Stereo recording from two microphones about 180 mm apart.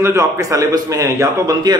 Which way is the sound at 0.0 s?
15° right (ahead or behind).